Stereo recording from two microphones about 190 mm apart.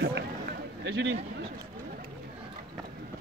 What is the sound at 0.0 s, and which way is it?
Run, 65° right (ahead or behind).